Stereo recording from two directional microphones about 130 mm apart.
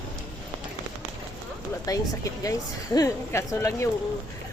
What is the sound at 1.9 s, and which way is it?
A woman's voice, 30° left (ahead or behind).